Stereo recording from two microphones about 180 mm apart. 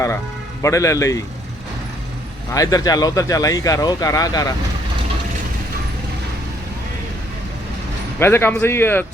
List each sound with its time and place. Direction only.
0.6 s a man's voice: 15° left (ahead or behind)
2.5 s speech: 20° left (ahead or behind)
8.2 s a man's voice: 10° left (ahead or behind)